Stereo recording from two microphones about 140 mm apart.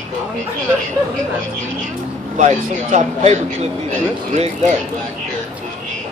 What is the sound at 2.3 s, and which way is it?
Speech, 60° right (ahead or behind).